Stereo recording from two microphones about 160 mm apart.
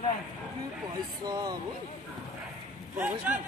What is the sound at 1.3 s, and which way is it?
Speech, 25° right (ahead or behind).